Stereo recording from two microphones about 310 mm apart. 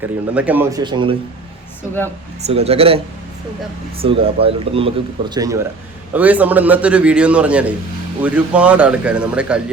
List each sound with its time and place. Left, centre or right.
0.0 s speech: centre
2.5 s a man's voice: centre